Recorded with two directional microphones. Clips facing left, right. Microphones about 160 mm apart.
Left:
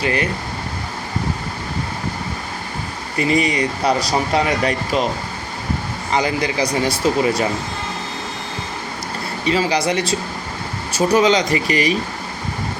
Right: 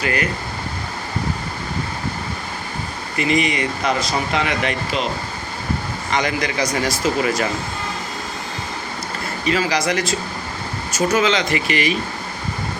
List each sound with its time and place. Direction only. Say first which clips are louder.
0.0 s speech: left 2 dB; 30° left (ahead or behind)
3.2 s speech: left 2 dB; 35° left (ahead or behind)
6.1 s speech: left 2 dB; 30° left (ahead or behind)
9.5 s speech: left 2 dB; 30° left (ahead or behind)